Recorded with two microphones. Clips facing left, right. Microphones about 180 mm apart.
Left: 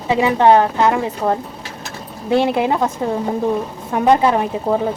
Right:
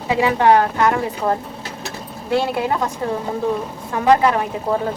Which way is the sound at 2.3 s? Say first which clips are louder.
Left 4 dB; 25° left (ahead or behind).